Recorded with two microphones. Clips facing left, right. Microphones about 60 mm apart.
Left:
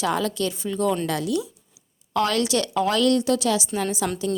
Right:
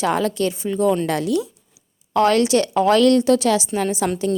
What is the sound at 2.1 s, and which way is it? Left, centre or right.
A woman's voice, right.